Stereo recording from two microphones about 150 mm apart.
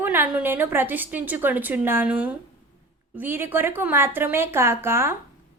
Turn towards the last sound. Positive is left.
turn(degrees=-15)  # may be behind; listen again after turning